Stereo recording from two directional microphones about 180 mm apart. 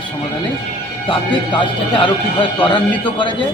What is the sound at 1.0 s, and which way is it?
Speech, 25° left (ahead or behind).